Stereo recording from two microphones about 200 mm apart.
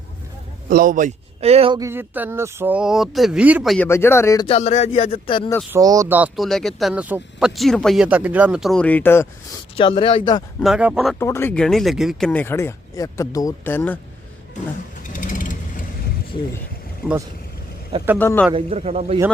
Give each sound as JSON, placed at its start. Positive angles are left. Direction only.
{"t": 0.7, "sound": "speech", "side_deg": -45}
{"t": 1.8, "sound": "speech", "side_deg": -10}
{"t": 3.8, "sound": "speech", "side_deg": 15}
{"t": 4.4, "sound": "speech", "side_deg": 30}
{"t": 5.7, "sound": "speech", "side_deg": -15}
{"t": 9.7, "sound": "speech", "side_deg": 25}
{"t": 10.6, "sound": "speech", "side_deg": -5}
{"t": 11.2, "sound": "speech", "side_deg": 10}
{"t": 15.1, "sound": "vehicle", "side_deg": 40}
{"t": 18.2, "sound": "speech", "side_deg": 10}
{"t": 18.5, "sound": "speech", "side_deg": -30}